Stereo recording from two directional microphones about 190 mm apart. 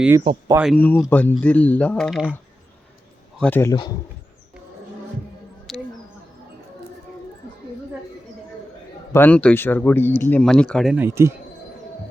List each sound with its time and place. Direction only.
0.3 s speech: 30° right (ahead or behind)
0.6 s speech: 5° left (ahead or behind)
5.7 s a sound: centre (ahead or behind)
9.1 s speech: 10° left (ahead or behind)
10.9 s speech: 10° right (ahead or behind)